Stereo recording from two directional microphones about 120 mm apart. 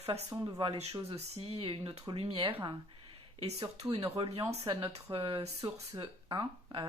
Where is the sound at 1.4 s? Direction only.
55° right (ahead or behind).